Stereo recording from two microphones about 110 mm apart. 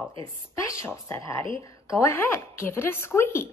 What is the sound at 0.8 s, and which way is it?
A woman's voice, 25° left (ahead or behind).